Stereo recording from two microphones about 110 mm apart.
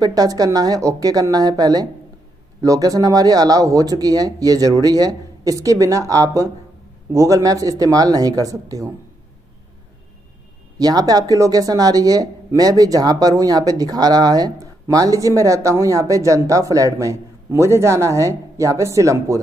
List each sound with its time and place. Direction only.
0.0 s speech: 35° right (ahead or behind)
10.8 s speech: 35° right (ahead or behind)